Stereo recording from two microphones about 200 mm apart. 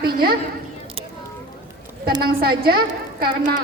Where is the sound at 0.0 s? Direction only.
50° right (ahead or behind).